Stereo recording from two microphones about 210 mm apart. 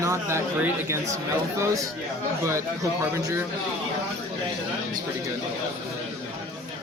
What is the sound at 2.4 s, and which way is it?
A man's voice, 15° right (ahead or behind).